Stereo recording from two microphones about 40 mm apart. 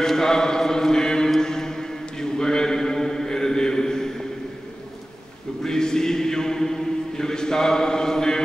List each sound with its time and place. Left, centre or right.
0.0 s mantra: centre
5.6 s chant: centre